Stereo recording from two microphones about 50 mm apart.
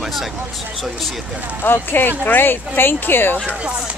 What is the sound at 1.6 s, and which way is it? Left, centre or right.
Speech, left.